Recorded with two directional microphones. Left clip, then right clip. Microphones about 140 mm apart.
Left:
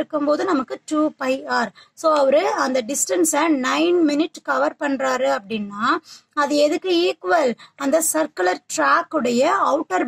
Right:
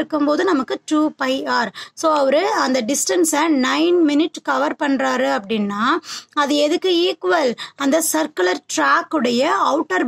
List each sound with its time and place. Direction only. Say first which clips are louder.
0.1 s a woman's voice: right 3 dB; 35° right (ahead or behind)